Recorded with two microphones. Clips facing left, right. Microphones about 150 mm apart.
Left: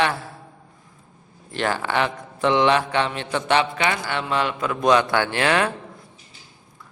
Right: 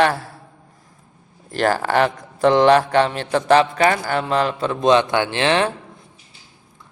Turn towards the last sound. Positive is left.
turn(degrees=-25)  # may be behind; listen again after turning